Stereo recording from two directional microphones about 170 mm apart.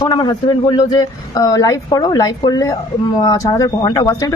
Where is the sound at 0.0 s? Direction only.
25° left (ahead or behind).